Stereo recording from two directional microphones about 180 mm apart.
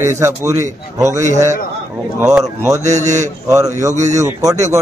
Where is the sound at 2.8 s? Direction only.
40° right (ahead or behind).